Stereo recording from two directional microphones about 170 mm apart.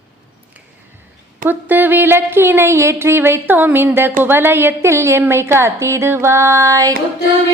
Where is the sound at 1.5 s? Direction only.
10° right (ahead or behind).